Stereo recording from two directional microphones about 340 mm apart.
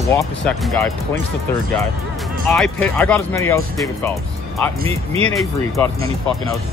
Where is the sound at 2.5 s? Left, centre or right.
Centre.